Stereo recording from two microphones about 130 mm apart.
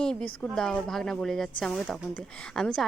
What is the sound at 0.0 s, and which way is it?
Speech, 5° left (ahead or behind).